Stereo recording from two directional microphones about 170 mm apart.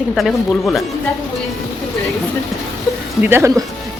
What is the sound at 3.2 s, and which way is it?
Speech, 15° right (ahead or behind).